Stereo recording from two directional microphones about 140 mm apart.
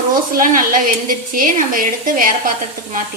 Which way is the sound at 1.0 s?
75° right (ahead or behind).